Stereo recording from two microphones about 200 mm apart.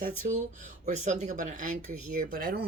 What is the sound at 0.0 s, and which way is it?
Speech, 40° right (ahead or behind).